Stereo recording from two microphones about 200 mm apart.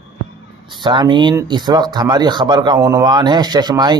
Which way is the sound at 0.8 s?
25° right (ahead or behind).